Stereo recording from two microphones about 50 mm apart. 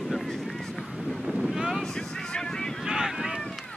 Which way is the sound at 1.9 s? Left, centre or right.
Centre.